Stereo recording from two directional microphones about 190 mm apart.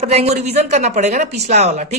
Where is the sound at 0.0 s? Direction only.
35° right (ahead or behind).